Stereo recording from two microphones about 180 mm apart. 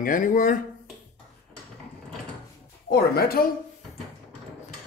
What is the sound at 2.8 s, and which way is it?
Speech, 60° left (ahead or behind).